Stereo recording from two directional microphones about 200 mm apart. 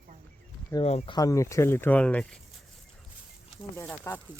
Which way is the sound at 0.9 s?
30° left (ahead or behind).